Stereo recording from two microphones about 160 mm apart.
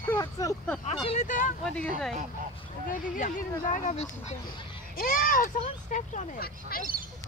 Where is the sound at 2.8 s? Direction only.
55° left (ahead or behind).